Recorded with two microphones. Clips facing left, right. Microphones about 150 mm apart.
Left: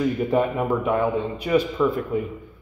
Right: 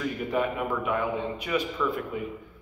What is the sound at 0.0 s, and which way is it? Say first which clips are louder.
A man's voice: left 7 dB; 35° left (ahead or behind).